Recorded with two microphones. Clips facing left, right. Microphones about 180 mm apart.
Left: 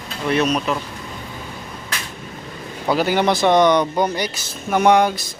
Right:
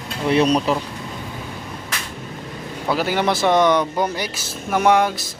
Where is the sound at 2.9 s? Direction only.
Centre (ahead or behind).